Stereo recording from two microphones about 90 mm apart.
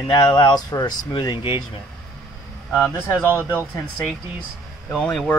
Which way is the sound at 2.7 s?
10° left (ahead or behind).